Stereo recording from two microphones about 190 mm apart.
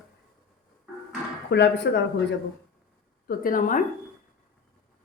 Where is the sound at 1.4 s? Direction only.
65° left (ahead or behind).